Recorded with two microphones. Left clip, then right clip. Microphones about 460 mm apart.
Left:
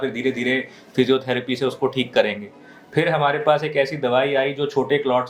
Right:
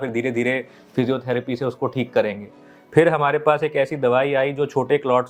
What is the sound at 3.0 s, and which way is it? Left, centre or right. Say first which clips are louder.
Speech: right 3 dB; right.